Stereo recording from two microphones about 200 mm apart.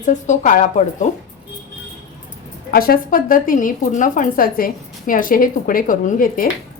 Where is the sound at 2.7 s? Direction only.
45° left (ahead or behind).